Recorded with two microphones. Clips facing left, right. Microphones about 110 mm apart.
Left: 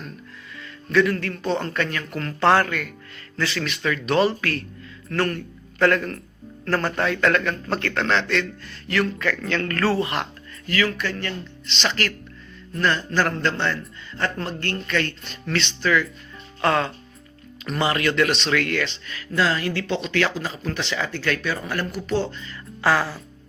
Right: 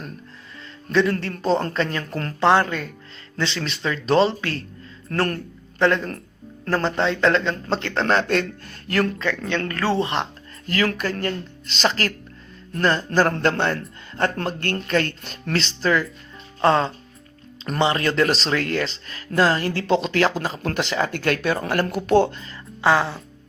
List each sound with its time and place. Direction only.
1.1 s speech: 40° right (ahead or behind)
2.4 s speech: 20° right (ahead or behind); by 5.4 s 35° right (ahead or behind)
5.8 s speech: 20° right (ahead or behind)
8.0 s speech: 45° right (ahead or behind)
9.1 s speech: 25° right (ahead or behind)
10.7 s speech: 45° right (ahead or behind)
13.1 s speech: 50° right (ahead or behind)
16.6 s speech: 25° right (ahead or behind); by 22.4 s 55° right (ahead or behind)
22.8 s speech: 20° right (ahead or behind)